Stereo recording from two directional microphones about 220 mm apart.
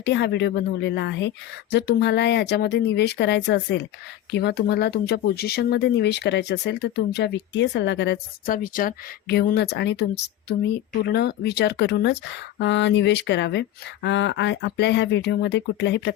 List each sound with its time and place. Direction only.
0.0 s speech: 50° left (ahead or behind)